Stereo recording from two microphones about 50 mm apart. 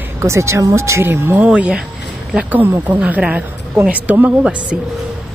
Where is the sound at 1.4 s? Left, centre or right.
Right.